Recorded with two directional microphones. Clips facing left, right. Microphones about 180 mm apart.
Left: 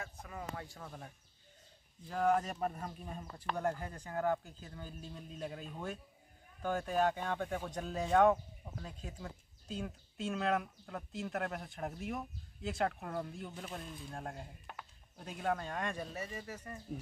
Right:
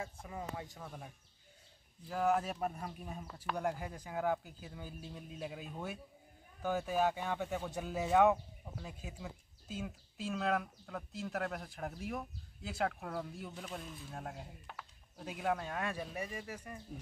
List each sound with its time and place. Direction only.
0.0 s speech: 25° right (ahead or behind)
0.4 s speech: 15° right (ahead or behind)